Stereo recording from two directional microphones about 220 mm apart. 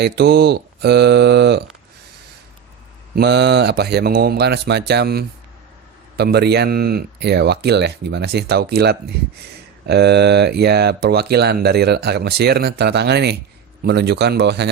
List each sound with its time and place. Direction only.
0.0 s speech: 45° right (ahead or behind)
3.2 s speech: 50° right (ahead or behind)